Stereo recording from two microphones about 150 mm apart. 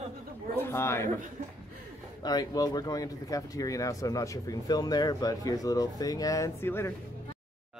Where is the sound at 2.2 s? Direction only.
25° left (ahead or behind).